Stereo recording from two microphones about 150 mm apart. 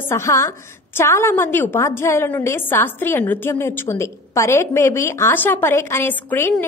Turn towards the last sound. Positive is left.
turn(degrees=15)  # may be behind; listen again after turning